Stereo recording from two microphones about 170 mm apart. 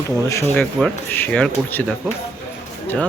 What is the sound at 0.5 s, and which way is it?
Speech, centre (ahead or behind).